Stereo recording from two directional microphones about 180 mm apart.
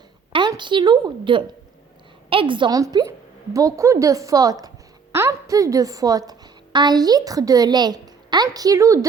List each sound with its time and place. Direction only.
0.3 s a woman's voice: 25° right (ahead or behind)